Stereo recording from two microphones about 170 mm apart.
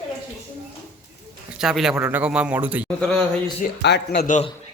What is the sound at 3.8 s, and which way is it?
Speech, 85° left.